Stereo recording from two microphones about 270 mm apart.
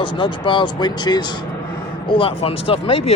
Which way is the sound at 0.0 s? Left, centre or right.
Centre.